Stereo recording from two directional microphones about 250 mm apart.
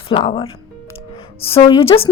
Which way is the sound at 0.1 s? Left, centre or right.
Centre.